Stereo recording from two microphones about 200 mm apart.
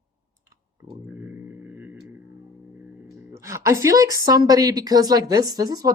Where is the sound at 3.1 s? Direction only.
15° right (ahead or behind).